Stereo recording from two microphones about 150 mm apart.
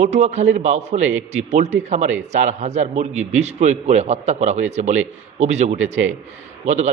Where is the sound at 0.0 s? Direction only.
50° right (ahead or behind).